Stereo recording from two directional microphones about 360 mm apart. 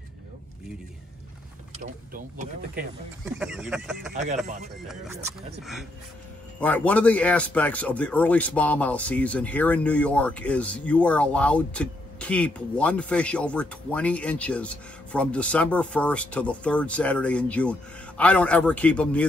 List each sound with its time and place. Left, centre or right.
1.8 s speech: right
3.3 s speech: centre
4.1 s speech: centre
4.8 s speech: centre